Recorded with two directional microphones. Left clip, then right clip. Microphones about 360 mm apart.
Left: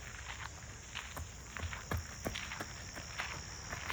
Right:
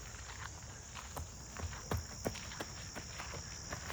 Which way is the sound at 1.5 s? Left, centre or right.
Centre.